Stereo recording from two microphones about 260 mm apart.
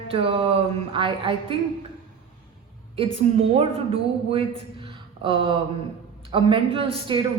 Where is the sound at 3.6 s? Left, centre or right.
Right.